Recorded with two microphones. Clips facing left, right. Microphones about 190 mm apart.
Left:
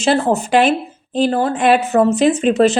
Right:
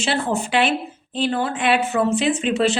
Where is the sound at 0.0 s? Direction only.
40° left (ahead or behind).